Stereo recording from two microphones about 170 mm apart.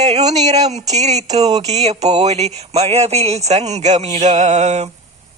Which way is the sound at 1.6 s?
40° right (ahead or behind).